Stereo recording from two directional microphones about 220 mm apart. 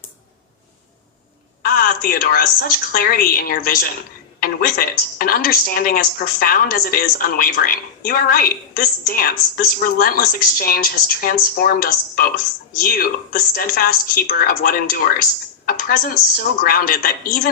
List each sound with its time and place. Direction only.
1.6 s speech: 40° left (ahead or behind)